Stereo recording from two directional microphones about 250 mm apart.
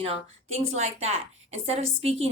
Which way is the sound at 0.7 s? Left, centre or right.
Right.